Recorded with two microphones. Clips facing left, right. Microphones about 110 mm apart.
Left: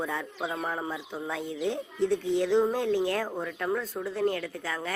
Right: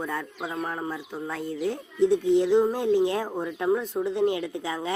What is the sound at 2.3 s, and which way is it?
Speech, 15° right (ahead or behind).